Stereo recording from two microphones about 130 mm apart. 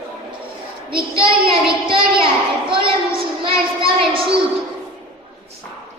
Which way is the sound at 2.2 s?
40° right (ahead or behind).